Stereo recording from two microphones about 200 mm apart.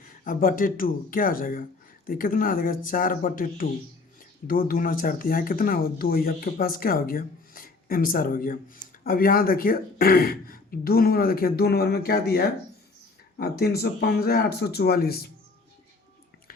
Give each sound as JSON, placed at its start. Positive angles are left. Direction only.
{"t": 0.0, "sound": "speech", "side_deg": 45}